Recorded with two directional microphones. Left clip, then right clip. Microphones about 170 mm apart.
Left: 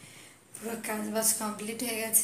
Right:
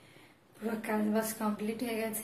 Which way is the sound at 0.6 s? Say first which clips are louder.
Right 1 dB; 15° right (ahead or behind).